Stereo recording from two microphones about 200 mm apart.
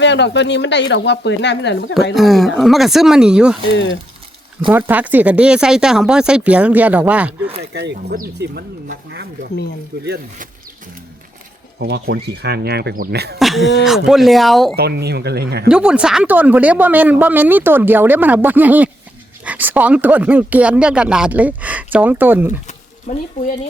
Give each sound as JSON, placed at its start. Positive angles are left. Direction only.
{"t": 0.0, "sound": "speech", "side_deg": 60}
{"t": 2.1, "sound": "speech", "side_deg": 0}
{"t": 3.7, "sound": "speech", "side_deg": 65}
{"t": 4.7, "sound": "speech", "side_deg": -10}
{"t": 7.7, "sound": "speech", "side_deg": -55}
{"t": 10.0, "sound": "speech", "side_deg": -50}
{"t": 11.8, "sound": "speech", "side_deg": -55}
{"t": 13.4, "sound": "speech", "side_deg": 0}
{"t": 14.8, "sound": "speech", "side_deg": -55}
{"t": 15.7, "sound": "speech", "side_deg": -5}
{"t": 23.1, "sound": "speech", "side_deg": 40}